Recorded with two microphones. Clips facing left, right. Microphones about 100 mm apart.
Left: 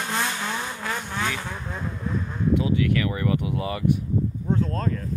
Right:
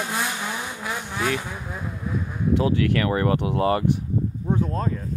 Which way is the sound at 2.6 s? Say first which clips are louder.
Right 2 dB; 75° right (ahead or behind).